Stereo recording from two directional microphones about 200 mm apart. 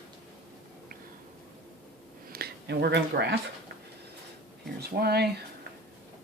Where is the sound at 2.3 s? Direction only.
50° right (ahead or behind).